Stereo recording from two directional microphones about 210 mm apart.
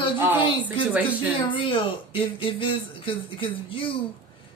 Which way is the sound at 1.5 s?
25° left (ahead or behind).